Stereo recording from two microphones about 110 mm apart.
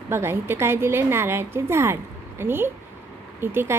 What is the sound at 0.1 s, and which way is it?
A woman's voice, 20° right (ahead or behind).